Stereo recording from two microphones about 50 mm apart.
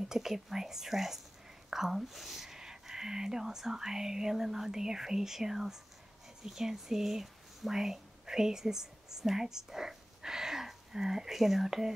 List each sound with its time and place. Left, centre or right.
0.0 s speech: centre